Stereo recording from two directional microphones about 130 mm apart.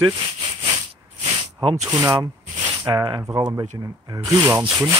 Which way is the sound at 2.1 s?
40° right (ahead or behind).